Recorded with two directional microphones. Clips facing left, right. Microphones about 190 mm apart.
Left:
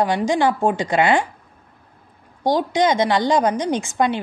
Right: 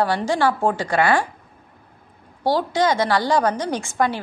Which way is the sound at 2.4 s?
20° left (ahead or behind).